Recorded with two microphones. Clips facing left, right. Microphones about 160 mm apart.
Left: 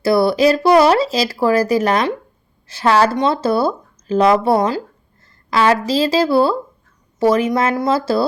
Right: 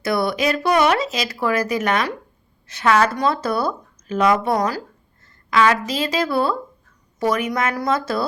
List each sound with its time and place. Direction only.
0.0 s a woman's voice: 30° left (ahead or behind)